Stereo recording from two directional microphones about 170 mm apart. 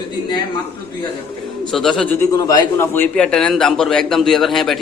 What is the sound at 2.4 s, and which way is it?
A man's voice, 20° left (ahead or behind).